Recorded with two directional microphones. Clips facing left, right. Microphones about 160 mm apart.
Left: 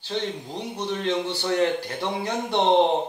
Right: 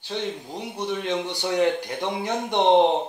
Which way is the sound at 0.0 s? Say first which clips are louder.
Left 1 dB; 10° right (ahead or behind).